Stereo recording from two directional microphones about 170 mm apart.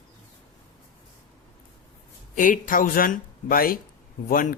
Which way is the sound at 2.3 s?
50° left (ahead or behind).